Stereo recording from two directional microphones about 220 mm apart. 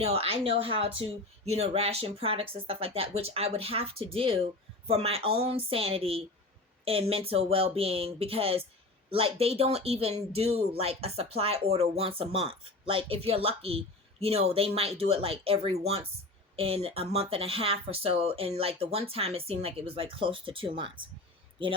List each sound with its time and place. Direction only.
0.0 s speech: 25° right (ahead or behind)